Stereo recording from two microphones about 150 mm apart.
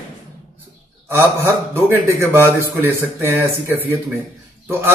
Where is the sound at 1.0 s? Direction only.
15° right (ahead or behind).